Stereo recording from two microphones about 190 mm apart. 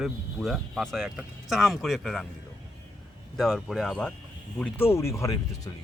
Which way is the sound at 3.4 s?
Centre (ahead or behind).